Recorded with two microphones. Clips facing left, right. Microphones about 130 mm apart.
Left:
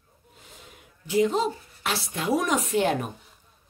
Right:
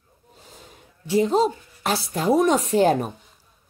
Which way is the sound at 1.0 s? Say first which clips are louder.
Right 4 dB; 35° right (ahead or behind).